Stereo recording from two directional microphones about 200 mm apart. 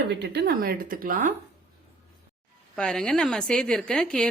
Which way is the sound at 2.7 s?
5° left (ahead or behind).